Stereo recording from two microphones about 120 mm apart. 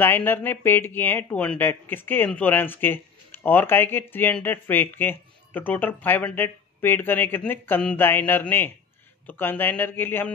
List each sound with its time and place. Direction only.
0.0 s speech: 15° left (ahead or behind)